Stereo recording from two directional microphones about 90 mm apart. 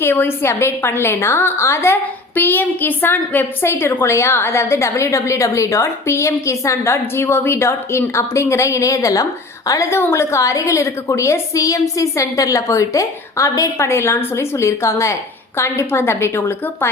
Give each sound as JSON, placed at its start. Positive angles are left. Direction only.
{"t": 0.0, "sound": "a woman's voice", "side_deg": 25}